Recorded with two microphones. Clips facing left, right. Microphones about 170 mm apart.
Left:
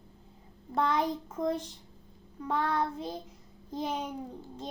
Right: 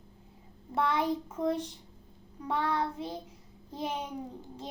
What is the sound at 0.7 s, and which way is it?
Child singing, 10° right (ahead or behind).